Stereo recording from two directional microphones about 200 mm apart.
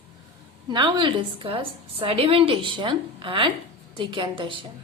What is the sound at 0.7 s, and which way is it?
A woman's voice, 25° right (ahead or behind).